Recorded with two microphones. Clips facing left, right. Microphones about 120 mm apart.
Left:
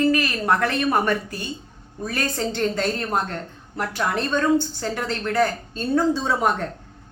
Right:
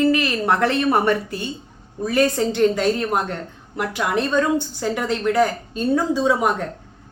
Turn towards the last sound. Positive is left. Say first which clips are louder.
# right 3 dB
turn(degrees=-10)  # may be behind; listen again after turning